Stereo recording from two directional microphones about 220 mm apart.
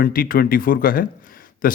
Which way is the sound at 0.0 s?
40° left (ahead or behind).